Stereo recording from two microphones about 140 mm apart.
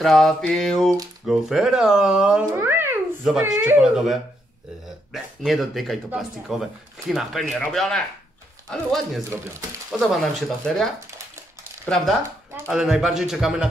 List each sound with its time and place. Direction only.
0.0 s speech: centre (ahead or behind)
2.5 s a sound: 15° right (ahead or behind)
3.3 s speech: 5° right (ahead or behind)
3.5 s speech: 15° right (ahead or behind)
3.8 s speech: centre (ahead or behind)
4.8 s a sound: centre (ahead or behind)
6.1 s speech: centre (ahead or behind)